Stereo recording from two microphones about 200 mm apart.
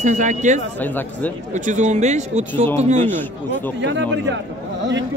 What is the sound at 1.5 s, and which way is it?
Speech, 35° right (ahead or behind).